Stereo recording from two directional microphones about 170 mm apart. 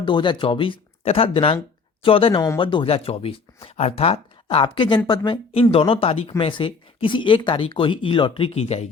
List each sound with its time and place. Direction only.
0.0 s speech: 30° left (ahead or behind)